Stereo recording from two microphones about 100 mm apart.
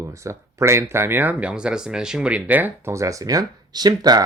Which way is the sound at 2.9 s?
30° right (ahead or behind).